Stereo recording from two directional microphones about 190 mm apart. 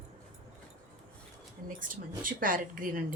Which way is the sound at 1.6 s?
45° right (ahead or behind).